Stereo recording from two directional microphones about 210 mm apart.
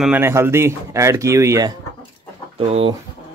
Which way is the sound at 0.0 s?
10° right (ahead or behind).